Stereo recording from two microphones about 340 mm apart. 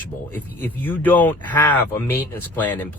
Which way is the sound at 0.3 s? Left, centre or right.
Centre.